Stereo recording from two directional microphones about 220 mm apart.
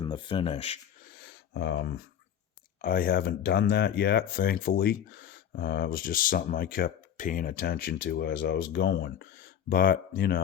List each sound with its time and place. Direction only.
0.0 s speech: 20° left (ahead or behind)
1.2 s a sound: 50° left (ahead or behind)
2.8 s speech: 40° left (ahead or behind)